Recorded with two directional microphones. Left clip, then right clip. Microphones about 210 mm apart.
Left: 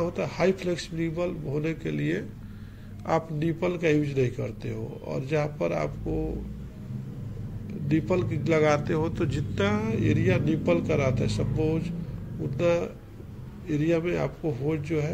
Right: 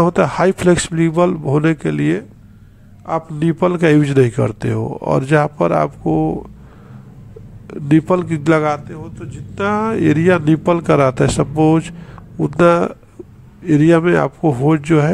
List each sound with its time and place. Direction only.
0.0 s a man's voice: 45° right (ahead or behind)
3.3 s a man's voice: 40° right (ahead or behind)
7.6 s a man's voice: 45° right (ahead or behind)
8.8 s speech: 10° left (ahead or behind)
9.6 s a man's voice: 30° right (ahead or behind)